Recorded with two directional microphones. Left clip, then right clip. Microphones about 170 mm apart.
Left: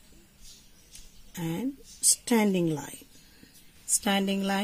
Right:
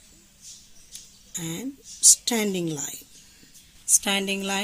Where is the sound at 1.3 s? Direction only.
40° left (ahead or behind).